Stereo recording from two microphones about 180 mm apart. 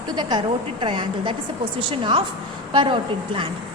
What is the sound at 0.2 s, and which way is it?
A woman's voice, 25° right (ahead or behind).